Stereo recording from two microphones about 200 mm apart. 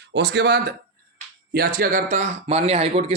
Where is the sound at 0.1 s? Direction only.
55° right (ahead or behind).